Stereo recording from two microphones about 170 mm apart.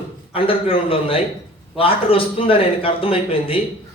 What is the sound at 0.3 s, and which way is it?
A man's voice, 30° left (ahead or behind).